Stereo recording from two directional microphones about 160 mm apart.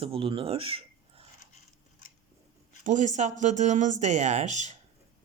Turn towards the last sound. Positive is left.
turn(degrees=-45)  # may be behind; listen again after turning